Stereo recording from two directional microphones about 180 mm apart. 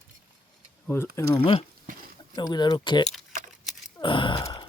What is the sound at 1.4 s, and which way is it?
Speech, 35° left (ahead or behind).